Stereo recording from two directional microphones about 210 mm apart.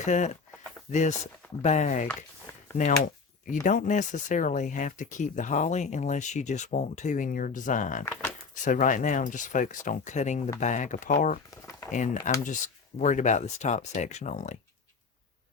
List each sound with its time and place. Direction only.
0.0 s speech: 35° left (ahead or behind)
8.0 s speech: 10° left (ahead or behind)
8.6 s speech: 40° left (ahead or behind)